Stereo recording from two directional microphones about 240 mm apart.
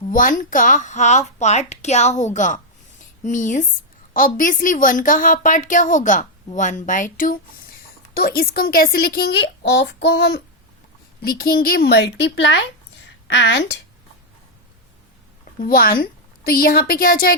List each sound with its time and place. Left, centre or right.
0.1 s a woman's voice: left
15.6 s a woman's voice: left